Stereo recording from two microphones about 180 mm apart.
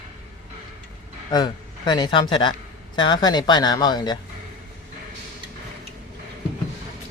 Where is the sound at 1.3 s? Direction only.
25° left (ahead or behind).